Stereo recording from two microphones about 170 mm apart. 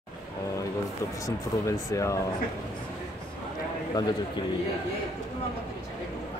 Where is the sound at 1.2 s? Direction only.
20° left (ahead or behind).